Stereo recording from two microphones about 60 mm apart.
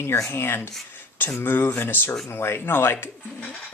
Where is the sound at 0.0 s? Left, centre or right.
Left.